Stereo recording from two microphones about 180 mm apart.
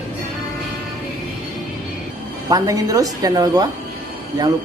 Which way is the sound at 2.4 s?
20° right (ahead or behind).